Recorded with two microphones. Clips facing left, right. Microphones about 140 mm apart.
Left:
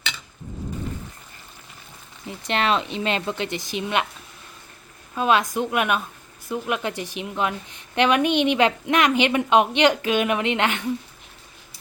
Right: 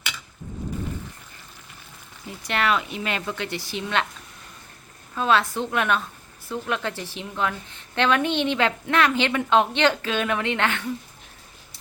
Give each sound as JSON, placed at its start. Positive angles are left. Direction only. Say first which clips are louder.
{"t": 2.2, "sound": "speech", "louder": "left 1 dB", "side_deg": 25}
{"t": 5.1, "sound": "a woman's voice", "louder": "left 1 dB", "side_deg": 15}